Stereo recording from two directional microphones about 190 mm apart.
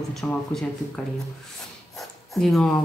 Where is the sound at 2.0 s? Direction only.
Centre (ahead or behind).